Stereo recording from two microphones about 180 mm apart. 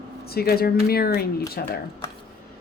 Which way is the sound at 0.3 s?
60° left (ahead or behind).